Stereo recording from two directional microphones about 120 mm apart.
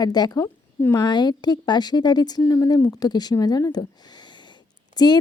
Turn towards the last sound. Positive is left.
turn(degrees=35)  # may be behind; listen again after turning